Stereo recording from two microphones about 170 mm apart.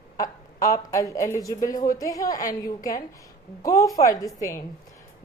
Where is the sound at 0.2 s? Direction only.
20° left (ahead or behind).